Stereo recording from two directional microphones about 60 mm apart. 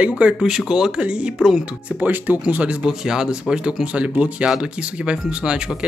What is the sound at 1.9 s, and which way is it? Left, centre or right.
A man's voice, right.